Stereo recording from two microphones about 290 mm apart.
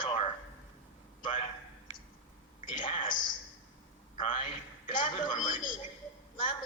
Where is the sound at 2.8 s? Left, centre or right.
Centre.